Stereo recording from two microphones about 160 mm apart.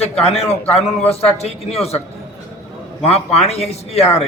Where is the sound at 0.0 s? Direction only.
40° left (ahead or behind).